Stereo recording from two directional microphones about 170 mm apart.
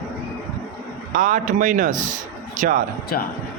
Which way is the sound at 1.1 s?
50° right (ahead or behind).